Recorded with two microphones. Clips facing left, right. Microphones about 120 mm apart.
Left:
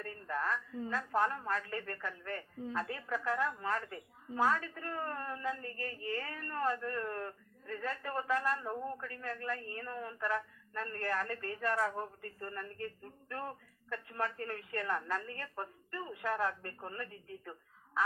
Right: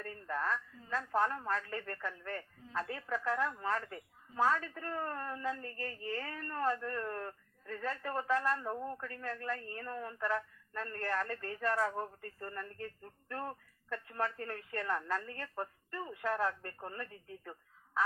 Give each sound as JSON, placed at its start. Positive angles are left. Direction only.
{"t": 0.0, "sound": "speech", "side_deg": -30}